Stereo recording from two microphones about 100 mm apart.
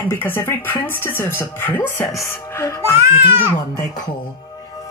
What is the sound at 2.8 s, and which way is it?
Speech, 25° right (ahead or behind).